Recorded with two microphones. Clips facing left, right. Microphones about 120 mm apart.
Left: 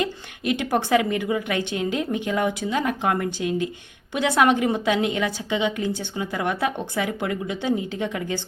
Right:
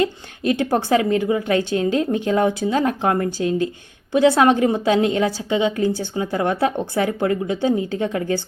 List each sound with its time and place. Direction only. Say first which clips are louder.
0.6 s speech: right 2 dB; 30° right (ahead or behind)
3.2 s speech: right 4 dB; 20° left (ahead or behind)
4.1 s speech: right 5 dB; 30° right (ahead or behind)